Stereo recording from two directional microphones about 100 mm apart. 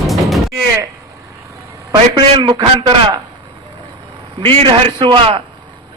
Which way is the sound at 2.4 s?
45° right (ahead or behind).